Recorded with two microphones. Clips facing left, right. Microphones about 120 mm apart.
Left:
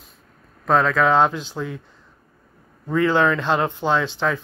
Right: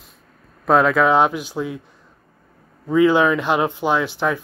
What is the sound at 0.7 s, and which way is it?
Speech, 5° right (ahead or behind).